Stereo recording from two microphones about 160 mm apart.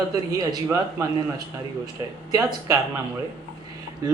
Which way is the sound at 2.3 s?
20° right (ahead or behind).